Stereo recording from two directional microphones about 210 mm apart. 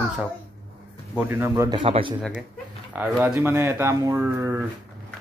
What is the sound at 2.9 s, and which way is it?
Speech, 5° right (ahead or behind).